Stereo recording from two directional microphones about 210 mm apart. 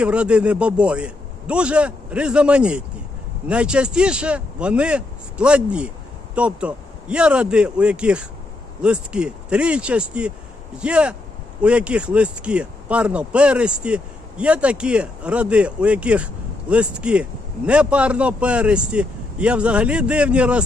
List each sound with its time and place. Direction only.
0.0 s speech: 5° right (ahead or behind)